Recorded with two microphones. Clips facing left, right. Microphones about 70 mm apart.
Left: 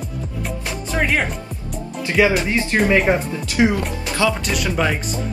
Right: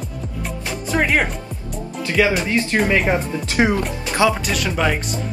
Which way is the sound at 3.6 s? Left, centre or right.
Right.